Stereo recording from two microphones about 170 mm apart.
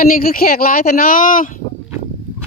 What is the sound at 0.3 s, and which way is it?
Speech, 60° left (ahead or behind).